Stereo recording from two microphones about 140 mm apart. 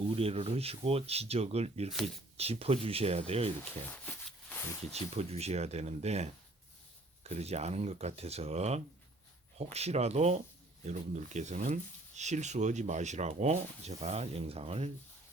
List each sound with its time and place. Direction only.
0.1 s speech: 45° right (ahead or behind)
3.9 s a sound: 10° left (ahead or behind)
4.9 s speech: 50° right (ahead or behind)